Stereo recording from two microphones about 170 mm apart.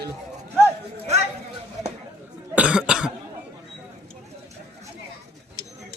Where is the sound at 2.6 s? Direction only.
5° right (ahead or behind).